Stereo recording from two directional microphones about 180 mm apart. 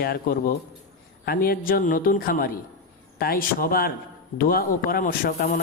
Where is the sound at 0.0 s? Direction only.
55° left (ahead or behind).